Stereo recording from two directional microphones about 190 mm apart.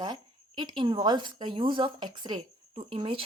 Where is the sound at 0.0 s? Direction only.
25° right (ahead or behind).